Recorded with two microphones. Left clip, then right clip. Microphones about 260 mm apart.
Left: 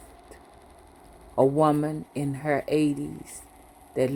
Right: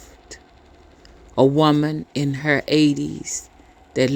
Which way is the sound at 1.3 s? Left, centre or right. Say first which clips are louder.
Right 5 dB; right.